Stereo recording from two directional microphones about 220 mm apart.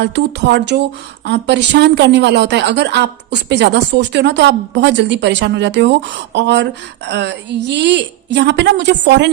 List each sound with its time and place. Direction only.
0.0 s a woman's voice: 50° right (ahead or behind)